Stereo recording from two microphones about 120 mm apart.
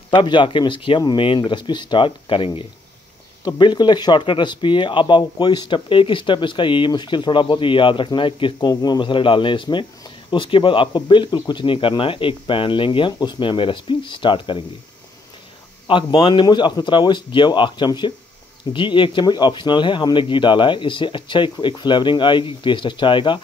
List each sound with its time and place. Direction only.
0.1 s speech: 40° left (ahead or behind)
15.9 s speech: 40° left (ahead or behind)